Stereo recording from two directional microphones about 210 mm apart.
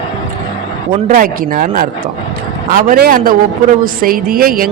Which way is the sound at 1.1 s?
40° right (ahead or behind).